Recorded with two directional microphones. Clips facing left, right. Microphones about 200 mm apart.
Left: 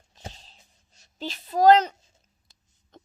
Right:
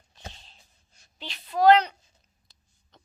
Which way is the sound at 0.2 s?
35° left (ahead or behind).